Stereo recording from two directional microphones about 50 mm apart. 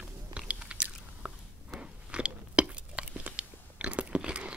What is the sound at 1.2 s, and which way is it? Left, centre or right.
Chewing, right.